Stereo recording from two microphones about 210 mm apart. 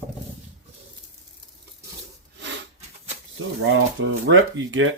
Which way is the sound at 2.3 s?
55° right (ahead or behind).